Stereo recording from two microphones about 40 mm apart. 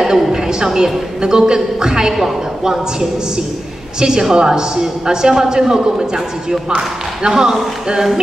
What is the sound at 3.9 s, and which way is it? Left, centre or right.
A woman's voice, centre.